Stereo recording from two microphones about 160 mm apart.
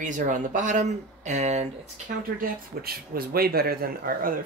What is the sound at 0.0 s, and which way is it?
Speech, 50° right (ahead or behind).